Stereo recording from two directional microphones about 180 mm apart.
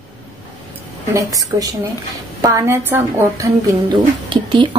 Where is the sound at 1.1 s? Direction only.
20° right (ahead or behind).